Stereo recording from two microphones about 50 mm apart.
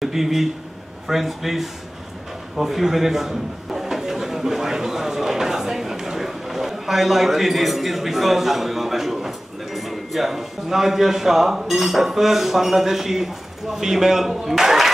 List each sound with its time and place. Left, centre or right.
0.0 s a man's voice: centre